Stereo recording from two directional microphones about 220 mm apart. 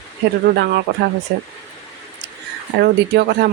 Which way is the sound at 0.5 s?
45° right (ahead or behind).